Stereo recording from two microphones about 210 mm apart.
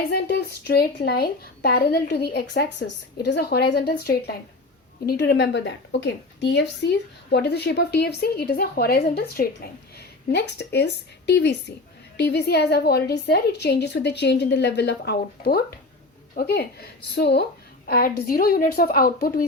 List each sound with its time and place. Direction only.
0.1 s a woman's voice: 50° left (ahead or behind)